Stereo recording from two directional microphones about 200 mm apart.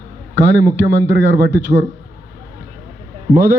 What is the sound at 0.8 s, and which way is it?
Speech, 60° right (ahead or behind).